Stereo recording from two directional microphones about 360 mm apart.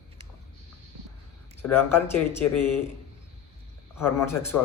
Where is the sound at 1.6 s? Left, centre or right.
Centre.